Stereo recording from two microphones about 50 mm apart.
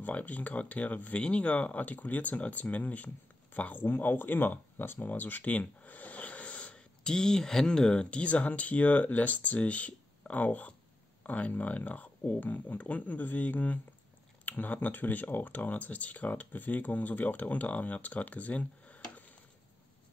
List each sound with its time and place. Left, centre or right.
0.0 s speech: left